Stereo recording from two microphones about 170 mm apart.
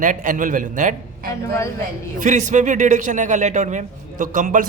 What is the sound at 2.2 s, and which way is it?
A man's voice, 45° right (ahead or behind).